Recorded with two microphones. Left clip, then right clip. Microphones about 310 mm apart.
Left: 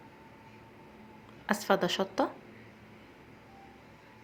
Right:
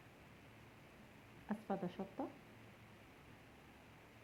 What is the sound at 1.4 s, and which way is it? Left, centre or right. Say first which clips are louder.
Speech: left 17 dB; centre.